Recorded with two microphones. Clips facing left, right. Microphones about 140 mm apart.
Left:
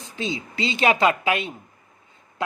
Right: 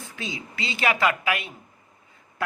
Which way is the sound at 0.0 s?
25° left (ahead or behind).